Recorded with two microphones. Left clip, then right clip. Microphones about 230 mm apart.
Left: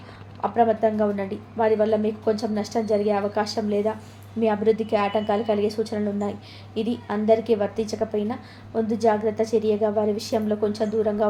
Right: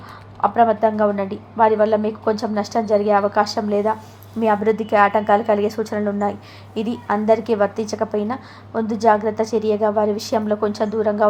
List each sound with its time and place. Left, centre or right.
0.4 s a woman's voice: centre